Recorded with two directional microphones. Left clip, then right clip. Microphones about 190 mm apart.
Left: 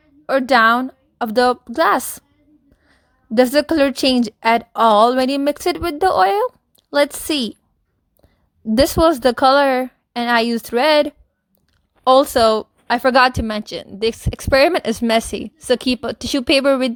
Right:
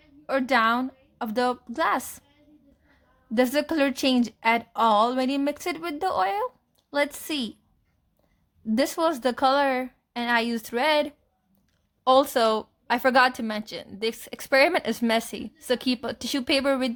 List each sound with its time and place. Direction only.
0.3 s a woman's voice: 40° left (ahead or behind)
8.6 s speech: 40° left (ahead or behind)